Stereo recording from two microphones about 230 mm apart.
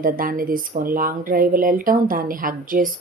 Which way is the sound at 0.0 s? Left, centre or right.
Right.